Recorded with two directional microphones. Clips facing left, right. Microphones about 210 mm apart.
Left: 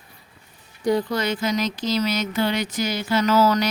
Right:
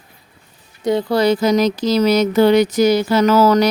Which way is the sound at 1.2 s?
35° right (ahead or behind).